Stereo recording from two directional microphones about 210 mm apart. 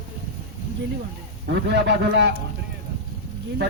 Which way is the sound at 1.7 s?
55° right (ahead or behind).